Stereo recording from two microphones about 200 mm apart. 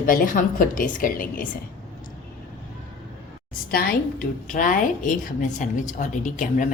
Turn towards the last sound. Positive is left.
turn(degrees=40)  # may be behind; listen again after turning